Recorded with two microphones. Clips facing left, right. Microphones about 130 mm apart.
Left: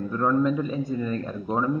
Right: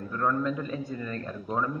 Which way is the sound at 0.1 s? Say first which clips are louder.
Left 5 dB; 20° left (ahead or behind).